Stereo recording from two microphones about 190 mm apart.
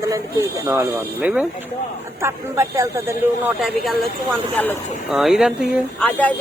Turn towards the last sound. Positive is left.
turn(degrees=10)  # may be behind; listen again after turning